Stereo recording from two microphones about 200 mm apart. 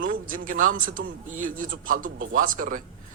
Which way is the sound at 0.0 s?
40° right (ahead or behind).